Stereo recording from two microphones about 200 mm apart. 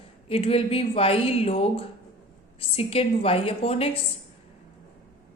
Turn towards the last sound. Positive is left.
turn(degrees=30)  # may be behind; listen again after turning